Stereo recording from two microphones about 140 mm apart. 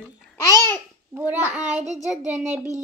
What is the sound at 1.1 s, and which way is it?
Speech, 15° right (ahead or behind).